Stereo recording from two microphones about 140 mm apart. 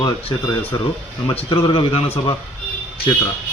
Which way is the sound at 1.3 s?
40° left (ahead or behind).